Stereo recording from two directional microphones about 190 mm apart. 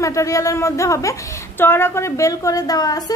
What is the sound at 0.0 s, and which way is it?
A woman's voice, 15° left (ahead or behind).